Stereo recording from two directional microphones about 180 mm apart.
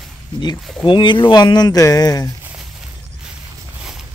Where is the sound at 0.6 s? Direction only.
Centre (ahead or behind).